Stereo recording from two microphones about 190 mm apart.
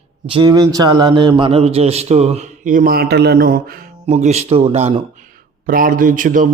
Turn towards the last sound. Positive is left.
turn(degrees=-45)  # may be behind; listen again after turning